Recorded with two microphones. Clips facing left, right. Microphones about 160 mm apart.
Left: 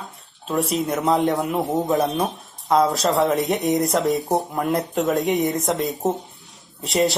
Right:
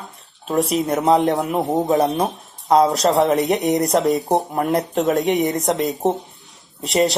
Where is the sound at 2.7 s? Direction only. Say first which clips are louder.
Right 3 dB; 25° right (ahead or behind).